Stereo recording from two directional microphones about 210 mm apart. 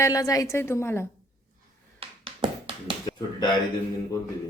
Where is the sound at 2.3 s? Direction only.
25° right (ahead or behind).